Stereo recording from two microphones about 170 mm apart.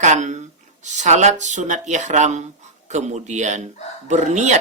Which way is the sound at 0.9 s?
45° right (ahead or behind).